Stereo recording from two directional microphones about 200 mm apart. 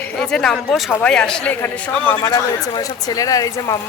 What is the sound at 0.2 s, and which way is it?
A woman's voice, 5° left (ahead or behind).